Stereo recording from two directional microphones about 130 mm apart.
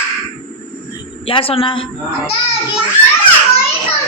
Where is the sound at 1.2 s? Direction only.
45° left (ahead or behind).